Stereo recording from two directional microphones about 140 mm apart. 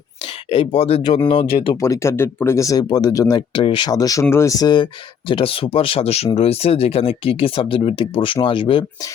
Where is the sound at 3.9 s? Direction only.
25° left (ahead or behind).